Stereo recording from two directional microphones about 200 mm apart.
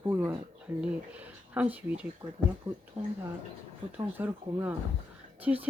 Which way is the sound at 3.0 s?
30° right (ahead or behind).